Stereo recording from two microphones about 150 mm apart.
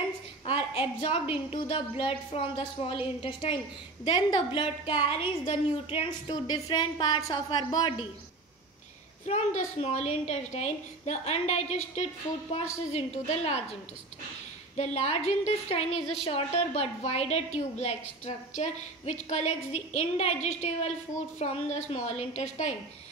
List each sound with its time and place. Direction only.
0.5 s a woman's voice: 40° left (ahead or behind)
6.2 s a woman's voice: 25° left (ahead or behind)
9.2 s a woman's voice: 50° left (ahead or behind)
15.0 s a woman's voice: 45° left (ahead or behind)